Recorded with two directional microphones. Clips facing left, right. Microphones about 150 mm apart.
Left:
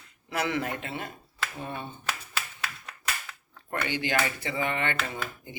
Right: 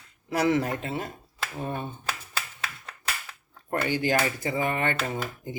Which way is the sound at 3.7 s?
40° right (ahead or behind).